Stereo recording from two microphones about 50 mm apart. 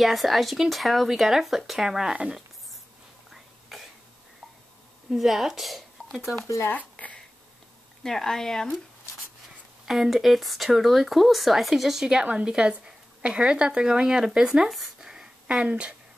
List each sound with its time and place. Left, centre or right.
0.0 s speech: centre
3.3 s whispering: centre
5.1 s speech: centre
6.4 s speech: left
7.0 s speech: left
8.0 s speech: centre
9.8 s speech: centre
14.7 s a sound: centre
15.5 s speech: centre